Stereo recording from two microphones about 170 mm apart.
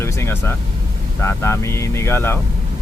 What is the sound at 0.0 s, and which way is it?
Vehicle, 15° left (ahead or behind).